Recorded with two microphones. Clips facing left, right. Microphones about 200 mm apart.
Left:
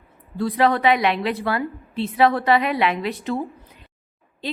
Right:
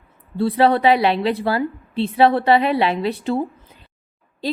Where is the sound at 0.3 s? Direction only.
30° right (ahead or behind).